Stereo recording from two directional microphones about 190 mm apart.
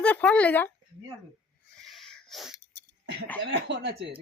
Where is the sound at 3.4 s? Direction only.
70° right (ahead or behind).